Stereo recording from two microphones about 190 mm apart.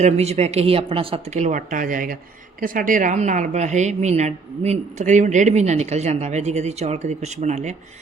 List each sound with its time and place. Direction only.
0.0 s a woman's voice: 35° right (ahead or behind)